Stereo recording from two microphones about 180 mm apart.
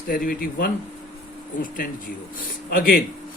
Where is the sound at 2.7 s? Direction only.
50° left (ahead or behind).